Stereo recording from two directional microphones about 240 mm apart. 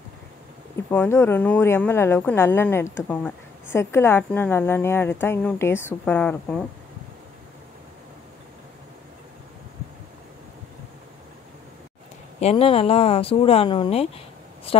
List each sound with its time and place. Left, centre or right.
0.8 s a woman's voice: centre
12.4 s speech: left